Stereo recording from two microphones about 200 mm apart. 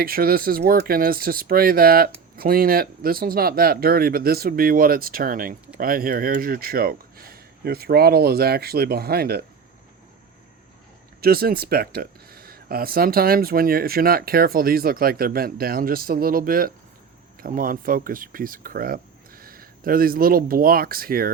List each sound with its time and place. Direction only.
0.0 s speech: 50° right (ahead or behind)
11.2 s speech: 50° right (ahead or behind)